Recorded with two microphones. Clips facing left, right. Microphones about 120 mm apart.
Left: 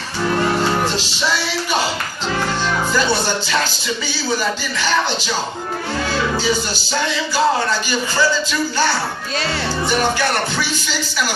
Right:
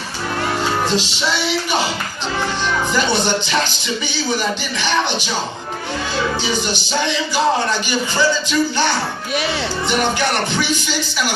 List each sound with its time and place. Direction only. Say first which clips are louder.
2.9 s speech: right 1 dB; 20° right (ahead or behind)
6.4 s speech: left 1 dB; 20° right (ahead or behind)